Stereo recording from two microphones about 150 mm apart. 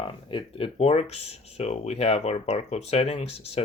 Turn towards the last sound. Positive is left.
turn(degrees=45)  # may be behind; listen again after turning